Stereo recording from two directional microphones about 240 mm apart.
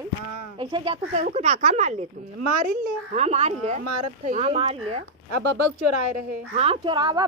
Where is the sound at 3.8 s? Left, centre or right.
Right.